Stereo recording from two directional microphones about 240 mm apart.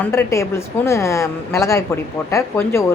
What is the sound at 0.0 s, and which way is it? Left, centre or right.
A woman's voice, centre.